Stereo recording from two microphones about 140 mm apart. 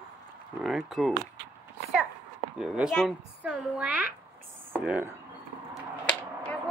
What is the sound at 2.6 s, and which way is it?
A child's voice, 5° right (ahead or behind).